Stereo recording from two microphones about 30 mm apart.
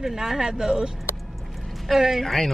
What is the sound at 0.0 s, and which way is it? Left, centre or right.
Speech, centre.